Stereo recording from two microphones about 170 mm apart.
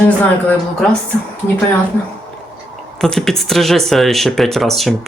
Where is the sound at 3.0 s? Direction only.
5° left (ahead or behind).